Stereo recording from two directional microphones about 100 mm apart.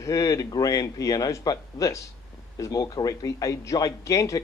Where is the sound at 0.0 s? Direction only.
35° left (ahead or behind).